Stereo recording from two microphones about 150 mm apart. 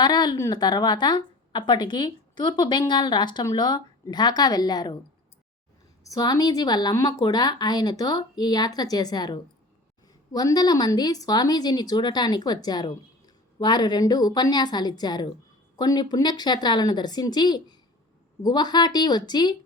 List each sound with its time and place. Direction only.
0.0 s a woman's voice: 30° left (ahead or behind)
6.0 s a woman's voice: 25° left (ahead or behind)